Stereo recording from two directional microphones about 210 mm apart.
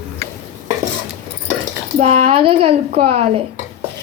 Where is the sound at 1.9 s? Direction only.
30° right (ahead or behind).